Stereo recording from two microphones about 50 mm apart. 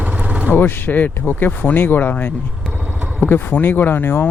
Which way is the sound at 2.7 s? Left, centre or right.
Right.